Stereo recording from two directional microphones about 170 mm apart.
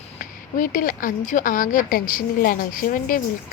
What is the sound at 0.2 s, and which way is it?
Speech, 50° left (ahead or behind).